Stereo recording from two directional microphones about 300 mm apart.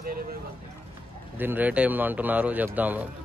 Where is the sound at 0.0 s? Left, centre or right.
Right.